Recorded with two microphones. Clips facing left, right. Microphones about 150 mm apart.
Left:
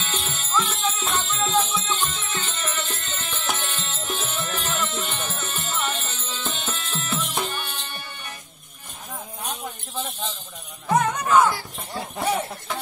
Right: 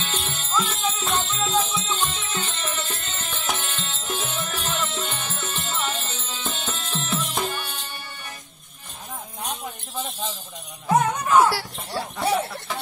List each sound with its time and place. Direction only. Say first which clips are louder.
0.1 s music: left 1 dB; centre (ahead or behind)
10.9 s music: even; 10° right (ahead or behind)
11.5 s a sound: right 3 dB; 75° right (ahead or behind)